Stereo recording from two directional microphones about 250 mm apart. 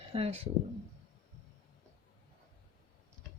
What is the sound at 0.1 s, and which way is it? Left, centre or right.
Speech, right.